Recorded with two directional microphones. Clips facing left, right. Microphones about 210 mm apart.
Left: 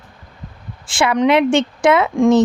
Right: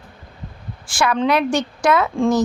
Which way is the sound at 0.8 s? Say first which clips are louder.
Left 4 dB; 25° left (ahead or behind).